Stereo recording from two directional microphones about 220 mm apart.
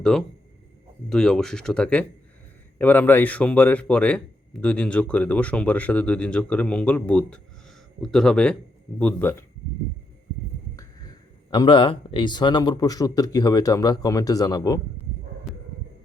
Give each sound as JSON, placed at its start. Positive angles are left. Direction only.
{"t": 0.0, "sound": "speech", "side_deg": 0}
{"t": 11.5, "sound": "speech", "side_deg": 20}
{"t": 15.5, "sound": "heart sounds", "side_deg": 0}